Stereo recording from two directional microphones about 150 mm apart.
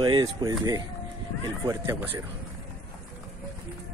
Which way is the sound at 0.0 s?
25° right (ahead or behind).